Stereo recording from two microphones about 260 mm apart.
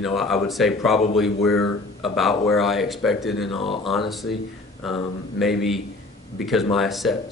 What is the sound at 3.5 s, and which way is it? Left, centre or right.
Speech, left.